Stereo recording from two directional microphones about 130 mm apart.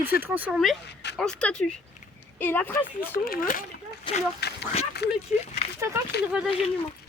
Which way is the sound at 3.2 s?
90° left.